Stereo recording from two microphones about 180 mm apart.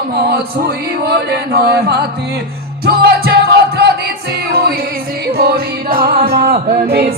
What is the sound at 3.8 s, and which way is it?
Music, 65° right (ahead or behind).